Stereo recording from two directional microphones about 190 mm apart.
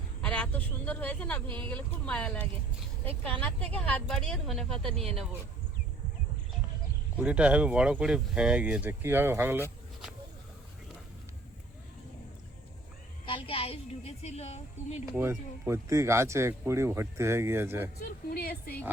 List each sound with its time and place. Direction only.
0.2 s a woman's voice: 5° left (ahead or behind)
7.2 s speech: 5° right (ahead or behind)
13.2 s a woman's voice: 30° left (ahead or behind)
15.1 s speech: 10° right (ahead or behind)
18.0 s a woman's voice: 55° left (ahead or behind)